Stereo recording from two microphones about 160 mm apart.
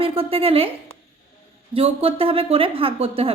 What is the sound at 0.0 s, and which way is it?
Speech, 35° right (ahead or behind).